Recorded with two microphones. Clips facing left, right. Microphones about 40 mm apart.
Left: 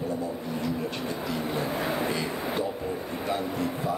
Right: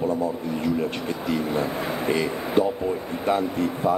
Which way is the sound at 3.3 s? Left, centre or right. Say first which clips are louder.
Right 7 dB; right.